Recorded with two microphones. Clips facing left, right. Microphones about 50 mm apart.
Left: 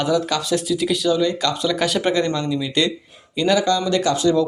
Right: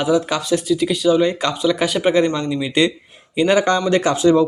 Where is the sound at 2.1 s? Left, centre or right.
Right.